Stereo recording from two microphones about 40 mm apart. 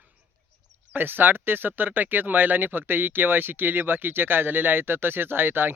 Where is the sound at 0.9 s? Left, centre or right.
Right.